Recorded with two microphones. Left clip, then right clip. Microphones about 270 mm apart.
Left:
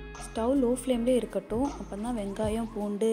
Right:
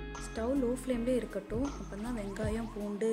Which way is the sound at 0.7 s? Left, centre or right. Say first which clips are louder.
Left 6 dB; centre.